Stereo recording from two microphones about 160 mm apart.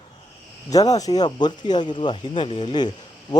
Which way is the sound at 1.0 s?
25° left (ahead or behind).